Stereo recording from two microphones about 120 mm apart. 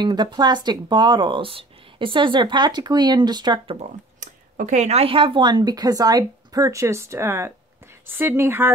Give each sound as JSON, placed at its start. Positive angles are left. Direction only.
{"t": 0.0, "sound": "speech", "side_deg": -40}
{"t": 4.2, "sound": "speech", "side_deg": -90}